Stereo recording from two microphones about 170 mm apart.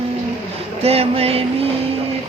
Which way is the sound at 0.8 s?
35° right (ahead or behind).